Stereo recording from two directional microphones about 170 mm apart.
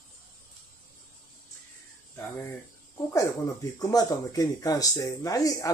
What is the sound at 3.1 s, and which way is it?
Speech, 20° left (ahead or behind).